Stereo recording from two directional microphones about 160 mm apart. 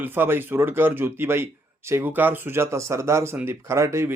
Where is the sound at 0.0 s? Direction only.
15° right (ahead or behind).